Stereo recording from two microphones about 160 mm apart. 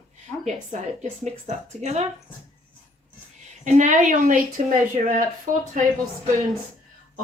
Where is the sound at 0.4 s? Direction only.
50° right (ahead or behind).